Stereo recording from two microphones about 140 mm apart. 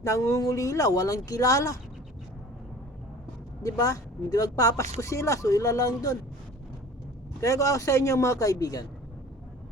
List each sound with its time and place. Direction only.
0.0 s speech: 20° left (ahead or behind)
3.6 s speech: 25° left (ahead or behind)
7.4 s speech: 20° left (ahead or behind)